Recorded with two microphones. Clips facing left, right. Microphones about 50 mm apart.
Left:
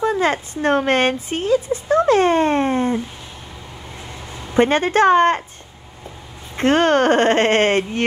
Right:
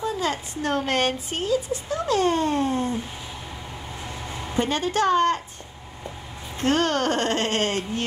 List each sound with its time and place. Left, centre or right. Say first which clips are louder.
0.0 s speech: left 8 dB; left
4.3 s a sound: even; centre
4.6 s speech: left 8 dB; left
6.5 s speech: left 7 dB; left